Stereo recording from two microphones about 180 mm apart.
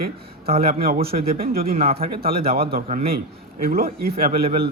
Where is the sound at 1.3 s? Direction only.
55° right (ahead or behind).